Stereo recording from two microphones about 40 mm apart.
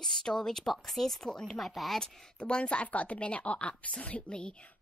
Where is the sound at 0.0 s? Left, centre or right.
Centre.